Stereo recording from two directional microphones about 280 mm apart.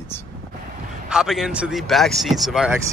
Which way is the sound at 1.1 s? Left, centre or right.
Centre.